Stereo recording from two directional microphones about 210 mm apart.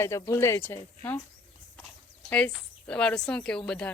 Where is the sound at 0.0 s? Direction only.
10° left (ahead or behind).